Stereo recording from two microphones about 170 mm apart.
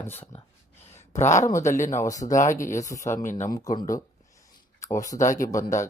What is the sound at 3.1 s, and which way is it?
Speech, 45° left (ahead or behind).